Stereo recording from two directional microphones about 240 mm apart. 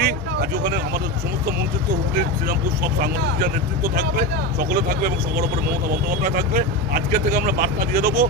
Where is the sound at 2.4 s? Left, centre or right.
Right.